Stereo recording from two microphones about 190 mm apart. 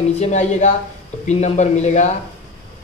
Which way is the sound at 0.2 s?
35° left (ahead or behind).